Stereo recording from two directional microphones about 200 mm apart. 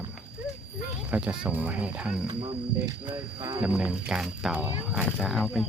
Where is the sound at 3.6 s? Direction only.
5° right (ahead or behind).